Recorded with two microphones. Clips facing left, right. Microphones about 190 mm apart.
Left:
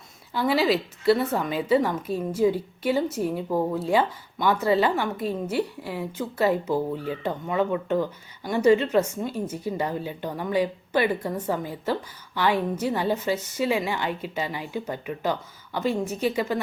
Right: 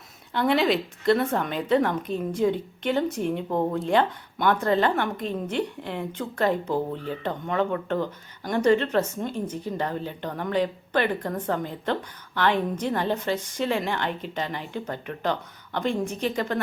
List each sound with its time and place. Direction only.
0.3 s speech: 5° left (ahead or behind)